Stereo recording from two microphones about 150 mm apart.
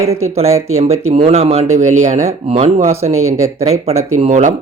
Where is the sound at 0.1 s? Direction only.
45° right (ahead or behind).